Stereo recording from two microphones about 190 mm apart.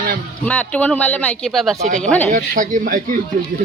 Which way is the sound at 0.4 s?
10° left (ahead or behind).